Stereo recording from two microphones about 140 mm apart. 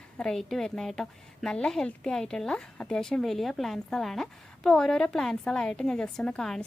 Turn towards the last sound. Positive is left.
turn(degrees=5)  # may be behind; listen again after turning